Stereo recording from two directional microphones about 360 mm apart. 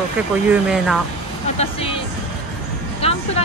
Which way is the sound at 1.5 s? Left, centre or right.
Centre.